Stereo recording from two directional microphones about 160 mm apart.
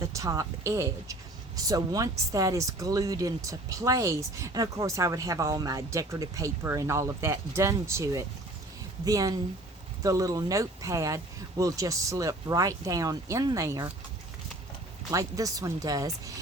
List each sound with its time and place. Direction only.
0.0 s speech: 20° right (ahead or behind)
15.1 s speech: 20° right (ahead or behind)